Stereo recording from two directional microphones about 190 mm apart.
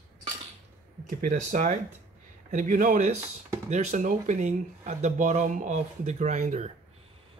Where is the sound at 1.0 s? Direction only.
40° right (ahead or behind).